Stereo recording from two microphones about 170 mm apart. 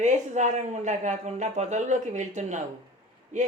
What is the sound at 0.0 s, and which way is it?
Speech, 45° right (ahead or behind).